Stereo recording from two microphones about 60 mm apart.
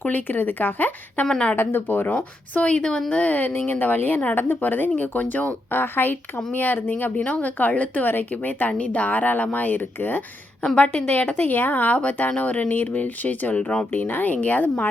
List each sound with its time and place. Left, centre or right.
0.0 s a woman's voice: left
1.3 s speech: centre
1.5 s speech: left
2.0 s a woman's voice: centre
7.2 s a woman's voice: left
10.8 s a woman's voice: centre
13.9 s a woman's voice: left